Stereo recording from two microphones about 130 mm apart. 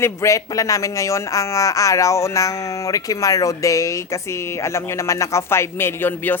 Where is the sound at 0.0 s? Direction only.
20° left (ahead or behind).